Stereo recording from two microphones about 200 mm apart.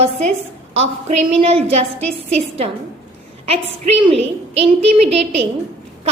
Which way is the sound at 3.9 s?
30° right (ahead or behind).